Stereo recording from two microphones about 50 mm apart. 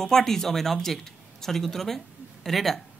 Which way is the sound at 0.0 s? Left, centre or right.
Centre.